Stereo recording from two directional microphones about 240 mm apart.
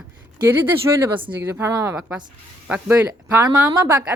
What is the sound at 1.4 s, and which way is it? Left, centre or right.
Speech, centre.